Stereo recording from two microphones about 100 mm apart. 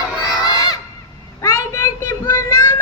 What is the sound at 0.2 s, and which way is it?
Honk, 40° left (ahead or behind).